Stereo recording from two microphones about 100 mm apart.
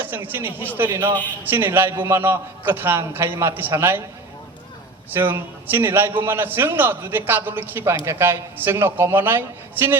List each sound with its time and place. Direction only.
0.0 s a man's voice: 20° right (ahead or behind)
5.1 s a man's voice: 25° right (ahead or behind)